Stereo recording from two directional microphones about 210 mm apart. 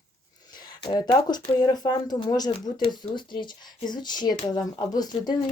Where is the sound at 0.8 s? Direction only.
20° left (ahead or behind).